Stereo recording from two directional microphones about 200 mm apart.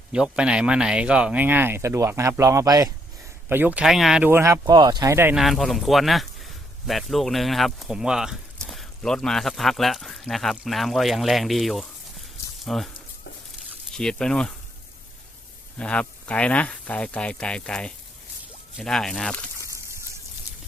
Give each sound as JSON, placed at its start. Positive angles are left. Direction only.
{"t": 0.1, "sound": "speech", "side_deg": -5}
{"t": 5.4, "sound": "speech", "side_deg": 0}
{"t": 13.9, "sound": "speech", "side_deg": 5}
{"t": 15.8, "sound": "speech", "side_deg": 5}